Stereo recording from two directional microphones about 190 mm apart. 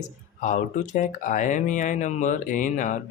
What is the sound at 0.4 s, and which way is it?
Speech, 40° left (ahead or behind).